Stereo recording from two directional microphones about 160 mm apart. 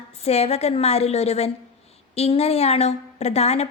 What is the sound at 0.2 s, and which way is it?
A woman's voice, 40° left (ahead or behind).